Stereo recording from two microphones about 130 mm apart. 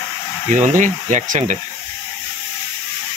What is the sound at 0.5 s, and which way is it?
Speech, 75° right (ahead or behind).